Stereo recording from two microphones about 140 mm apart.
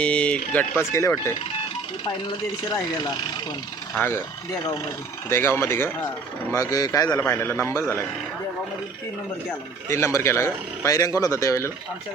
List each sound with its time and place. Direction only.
0.0 s speech: 10° left (ahead or behind)
0.8 s speech: 20° left (ahead or behind)
5.3 s a man's voice: 15° left (ahead or behind)
9.5 s speech: 20° left (ahead or behind)